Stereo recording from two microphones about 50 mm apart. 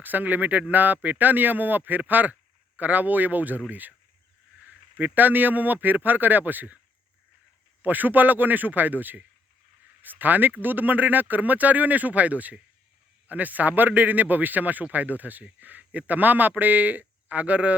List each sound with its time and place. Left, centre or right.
0.0 s a man's voice: right
7.8 s a man's voice: right